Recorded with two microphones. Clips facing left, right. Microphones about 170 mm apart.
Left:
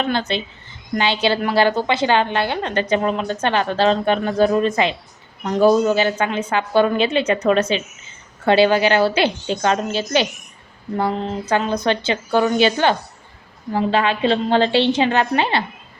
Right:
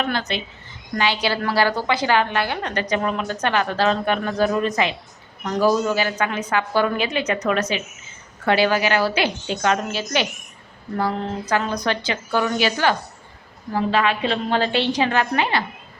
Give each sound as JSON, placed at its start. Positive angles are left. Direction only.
{"t": 0.0, "sound": "a woman's voice", "side_deg": 30}